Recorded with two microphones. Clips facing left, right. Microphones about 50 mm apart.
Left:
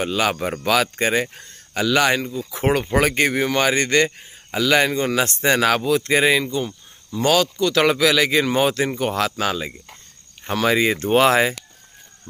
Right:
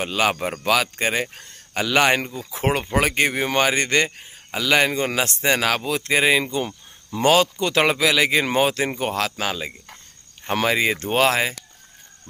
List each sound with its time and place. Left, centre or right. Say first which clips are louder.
0.0 s a man's voice: left 1 dB; centre
2.1 s speech: left 1 dB; right
2.5 s a man's voice: left 2 dB; centre
5.2 s speech: left 3 dB; centre
6.4 s a man's voice: left 1 dB; right; by 9.1 s centre
9.1 s speech: left 3 dB; centre